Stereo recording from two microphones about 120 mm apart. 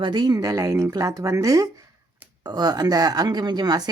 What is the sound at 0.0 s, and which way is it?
Speech, 40° right (ahead or behind).